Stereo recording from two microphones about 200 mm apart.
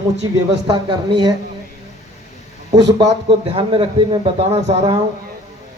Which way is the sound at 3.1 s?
25° right (ahead or behind).